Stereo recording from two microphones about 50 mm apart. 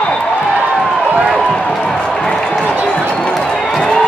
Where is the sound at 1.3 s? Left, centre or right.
Centre.